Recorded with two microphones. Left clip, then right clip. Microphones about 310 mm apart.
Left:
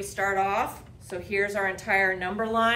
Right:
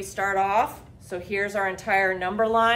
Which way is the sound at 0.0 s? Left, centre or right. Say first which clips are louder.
Right 2 dB; centre.